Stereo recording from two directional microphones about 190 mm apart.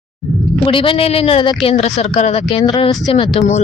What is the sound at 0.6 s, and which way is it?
Speech, 30° left (ahead or behind).